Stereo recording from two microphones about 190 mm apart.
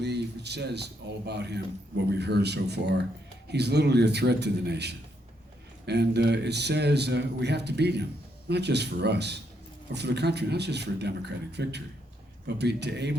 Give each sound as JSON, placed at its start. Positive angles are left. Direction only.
{"t": 0.0, "sound": "speech", "side_deg": -60}